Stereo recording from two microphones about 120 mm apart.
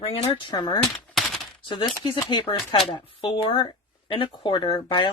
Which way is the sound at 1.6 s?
40° left (ahead or behind).